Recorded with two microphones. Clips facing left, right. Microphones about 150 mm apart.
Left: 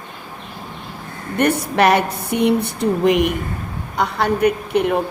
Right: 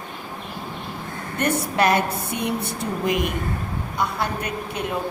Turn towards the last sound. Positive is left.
turn(degrees=65)  # may be behind; listen again after turning